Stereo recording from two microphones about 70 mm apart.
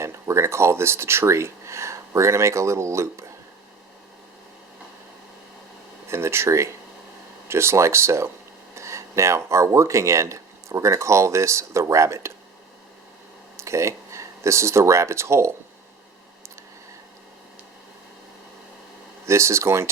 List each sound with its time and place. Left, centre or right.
0.0 s speech: right
6.1 s speech: right
13.6 s speech: right
19.3 s speech: right